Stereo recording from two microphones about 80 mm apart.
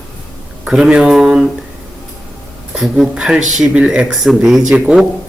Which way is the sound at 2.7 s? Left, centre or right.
Centre.